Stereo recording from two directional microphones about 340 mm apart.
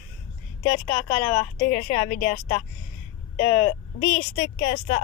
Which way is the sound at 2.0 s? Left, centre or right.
Left.